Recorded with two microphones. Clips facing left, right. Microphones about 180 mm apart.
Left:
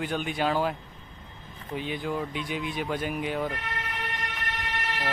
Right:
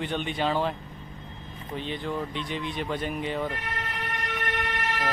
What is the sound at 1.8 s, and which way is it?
Speech, 5° left (ahead or behind).